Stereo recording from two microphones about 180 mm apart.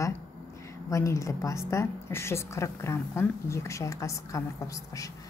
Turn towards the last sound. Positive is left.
turn(degrees=20)  # may be behind; listen again after turning